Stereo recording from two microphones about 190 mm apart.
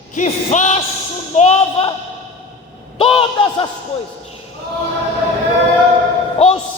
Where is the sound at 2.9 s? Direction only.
30° left (ahead or behind).